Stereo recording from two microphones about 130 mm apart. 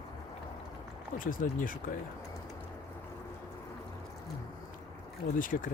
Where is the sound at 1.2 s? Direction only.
90° left.